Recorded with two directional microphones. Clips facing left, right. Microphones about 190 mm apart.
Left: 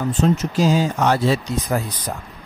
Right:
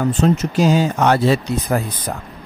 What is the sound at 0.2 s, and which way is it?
Speech, 65° right (ahead or behind).